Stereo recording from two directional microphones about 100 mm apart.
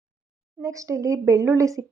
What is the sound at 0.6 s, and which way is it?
Speech, 30° right (ahead or behind).